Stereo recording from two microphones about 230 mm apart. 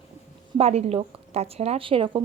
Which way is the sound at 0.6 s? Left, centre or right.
Right.